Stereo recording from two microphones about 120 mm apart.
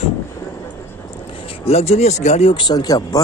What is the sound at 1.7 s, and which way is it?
Speech, 60° left (ahead or behind).